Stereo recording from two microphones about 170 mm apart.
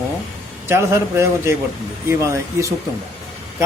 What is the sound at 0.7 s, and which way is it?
Mantra, 15° right (ahead or behind).